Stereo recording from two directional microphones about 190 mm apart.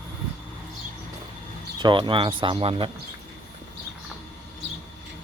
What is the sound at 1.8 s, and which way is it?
Speech, 25° right (ahead or behind).